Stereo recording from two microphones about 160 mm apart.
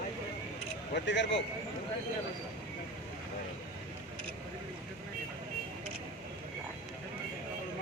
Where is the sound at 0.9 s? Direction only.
90° left.